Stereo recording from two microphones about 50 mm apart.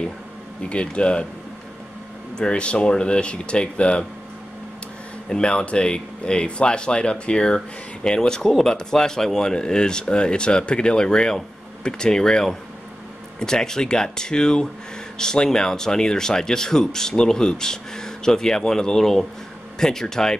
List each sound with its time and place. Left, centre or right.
0.7 s speech: left
2.3 s speech: centre
5.3 s speech: centre